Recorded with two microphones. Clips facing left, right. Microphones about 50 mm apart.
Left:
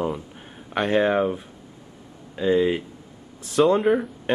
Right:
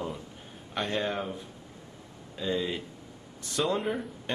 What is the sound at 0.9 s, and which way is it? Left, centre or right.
Speech, left.